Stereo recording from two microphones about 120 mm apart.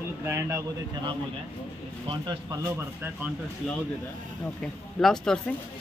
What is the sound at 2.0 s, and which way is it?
Speech, 40° right (ahead or behind).